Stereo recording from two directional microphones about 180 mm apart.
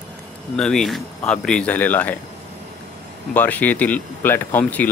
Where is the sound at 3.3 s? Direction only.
10° left (ahead or behind).